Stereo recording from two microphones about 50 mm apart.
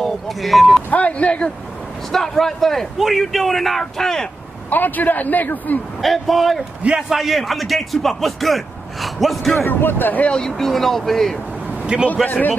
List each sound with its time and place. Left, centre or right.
0.0 s speech: centre
0.8 s speech: left
2.1 s a man's voice: centre
4.6 s a man's voice: left
5.9 s a man's voice: centre
9.7 s speech: left
10.3 s a man's voice: centre
11.8 s a man's voice: centre
12.3 s a man's voice: left